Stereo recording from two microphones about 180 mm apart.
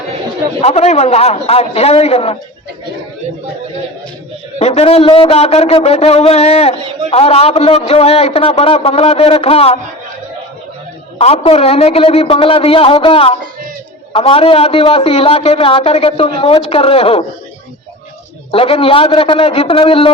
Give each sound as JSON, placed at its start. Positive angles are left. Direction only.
{"t": 0.6, "sound": "a man's voice", "side_deg": 35}
{"t": 4.6, "sound": "a man's voice", "side_deg": 35}
{"t": 11.2, "sound": "a man's voice", "side_deg": 35}
{"t": 18.5, "sound": "a man's voice", "side_deg": 30}